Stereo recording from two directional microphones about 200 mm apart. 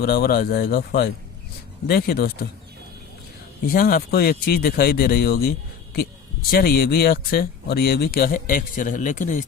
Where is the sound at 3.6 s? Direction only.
50° left (ahead or behind).